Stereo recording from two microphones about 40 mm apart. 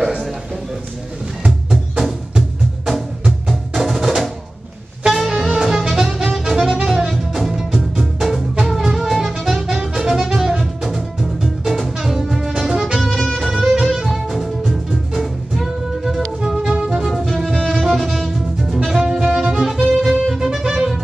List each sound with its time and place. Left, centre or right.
1.7 s music: centre
12.6 s music: centre
13.2 s music: centre
13.5 s music: centre